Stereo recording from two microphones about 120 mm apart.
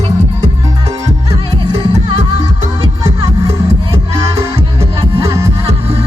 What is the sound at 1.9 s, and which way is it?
Music, 70° right (ahead or behind).